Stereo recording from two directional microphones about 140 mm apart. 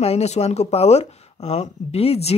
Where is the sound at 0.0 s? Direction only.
50° left (ahead or behind).